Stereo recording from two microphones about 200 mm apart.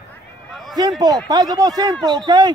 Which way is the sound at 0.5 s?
Centre (ahead or behind).